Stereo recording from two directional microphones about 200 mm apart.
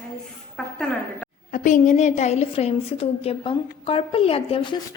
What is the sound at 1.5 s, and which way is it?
A woman's voice, 40° left (ahead or behind).